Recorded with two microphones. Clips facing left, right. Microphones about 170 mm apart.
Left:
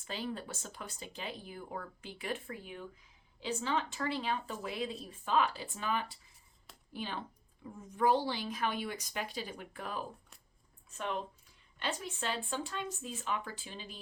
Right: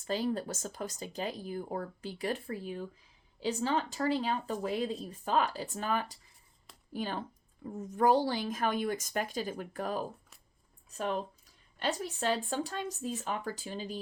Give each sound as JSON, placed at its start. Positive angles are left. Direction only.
{"t": 0.0, "sound": "a woman's voice", "side_deg": -40}